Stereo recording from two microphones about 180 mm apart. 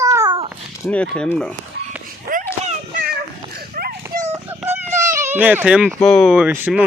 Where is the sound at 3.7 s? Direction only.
55° right (ahead or behind).